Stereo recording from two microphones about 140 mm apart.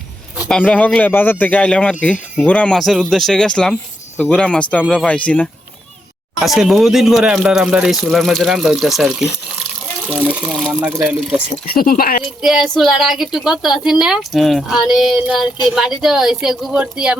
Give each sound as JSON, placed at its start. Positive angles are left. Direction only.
{"t": 0.4, "sound": "speech", "side_deg": 5}
{"t": 10.4, "sound": "speech", "side_deg": 0}
{"t": 10.8, "sound": "speech", "side_deg": -20}
{"t": 11.7, "sound": "speech", "side_deg": 90}
{"t": 12.4, "sound": "speech", "side_deg": -5}